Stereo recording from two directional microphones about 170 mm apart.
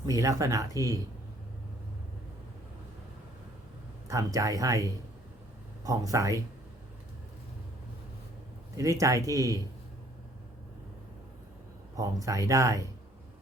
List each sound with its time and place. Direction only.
0.0 s speech: 20° right (ahead or behind)
4.1 s speech: 20° right (ahead or behind)
8.7 s speech: 20° right (ahead or behind)
11.9 s speech: 20° right (ahead or behind)